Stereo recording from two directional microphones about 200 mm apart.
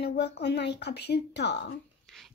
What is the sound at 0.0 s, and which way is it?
A child's voice, 55° left (ahead or behind).